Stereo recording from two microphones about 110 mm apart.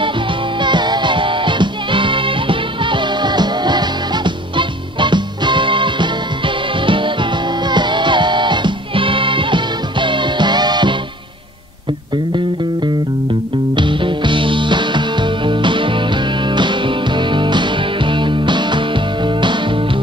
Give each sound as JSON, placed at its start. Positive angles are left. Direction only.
{"t": 0.6, "sound": "music", "side_deg": -45}
{"t": 13.7, "sound": "music", "side_deg": -50}